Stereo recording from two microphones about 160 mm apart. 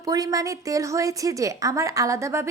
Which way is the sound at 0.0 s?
25° right (ahead or behind).